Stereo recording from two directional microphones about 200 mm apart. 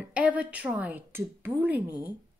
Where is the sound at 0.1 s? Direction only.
5° right (ahead or behind).